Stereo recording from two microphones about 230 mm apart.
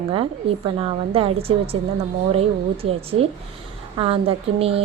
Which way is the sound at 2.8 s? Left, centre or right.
Right.